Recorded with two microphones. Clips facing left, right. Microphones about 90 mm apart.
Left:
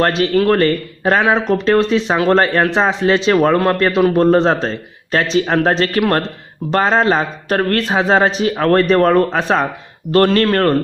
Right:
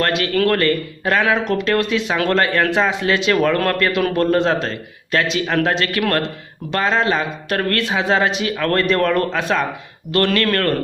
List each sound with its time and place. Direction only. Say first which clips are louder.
0.0 s speech: left 4 dB; 35° left (ahead or behind)